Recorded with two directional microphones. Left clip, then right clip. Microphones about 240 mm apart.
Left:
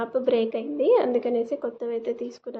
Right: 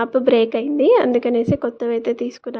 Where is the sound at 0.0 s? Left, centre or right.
Right.